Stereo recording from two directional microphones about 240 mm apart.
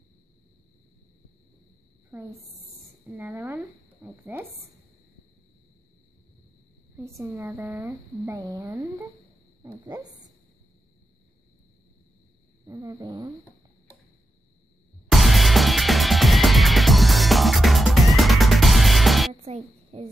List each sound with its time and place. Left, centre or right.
3.1 s speech: centre
7.0 s speech: centre
12.6 s speech: centre
15.0 s music: centre
19.4 s a sound: right